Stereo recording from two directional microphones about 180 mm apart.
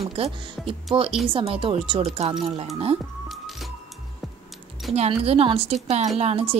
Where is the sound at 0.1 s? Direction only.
35° right (ahead or behind).